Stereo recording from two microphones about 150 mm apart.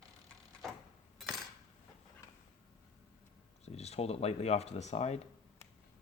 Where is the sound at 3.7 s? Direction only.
45° left (ahead or behind).